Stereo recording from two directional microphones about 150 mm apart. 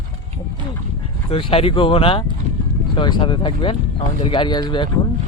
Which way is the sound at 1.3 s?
40° left (ahead or behind).